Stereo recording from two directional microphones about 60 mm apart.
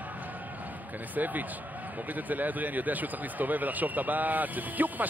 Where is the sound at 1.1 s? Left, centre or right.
Right.